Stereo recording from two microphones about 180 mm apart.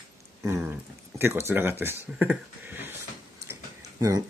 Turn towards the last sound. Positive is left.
turn(degrees=-15)  # may be behind; listen again after turning